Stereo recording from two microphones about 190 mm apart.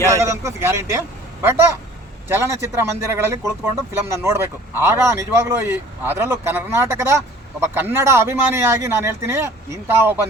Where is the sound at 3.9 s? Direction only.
15° right (ahead or behind).